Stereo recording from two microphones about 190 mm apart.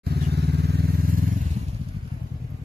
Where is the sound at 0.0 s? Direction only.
60° right (ahead or behind).